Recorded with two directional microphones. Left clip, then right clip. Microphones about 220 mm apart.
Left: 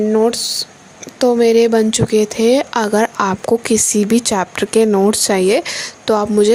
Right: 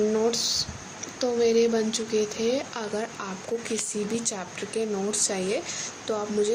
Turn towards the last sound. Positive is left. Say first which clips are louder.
# left 13 dB
turn(degrees=45)  # may be behind; listen again after turning